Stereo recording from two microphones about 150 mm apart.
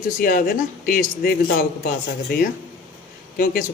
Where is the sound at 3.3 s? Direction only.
70° left (ahead or behind).